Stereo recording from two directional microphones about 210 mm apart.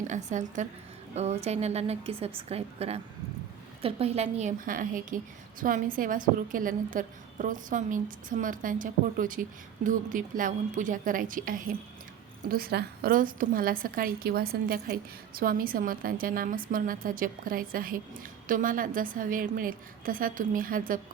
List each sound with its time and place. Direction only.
0.1 s a woman's voice: 35° right (ahead or behind)